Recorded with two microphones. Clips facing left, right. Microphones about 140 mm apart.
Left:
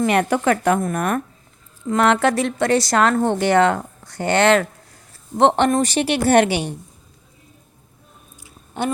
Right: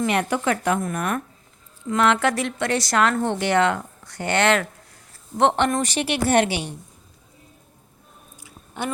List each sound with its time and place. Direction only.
0.0 s a woman's voice: 50° left (ahead or behind); by 6.3 s 35° left (ahead or behind)
6.3 s a woman's voice: 55° left (ahead or behind)
8.8 s a woman's voice: 30° left (ahead or behind)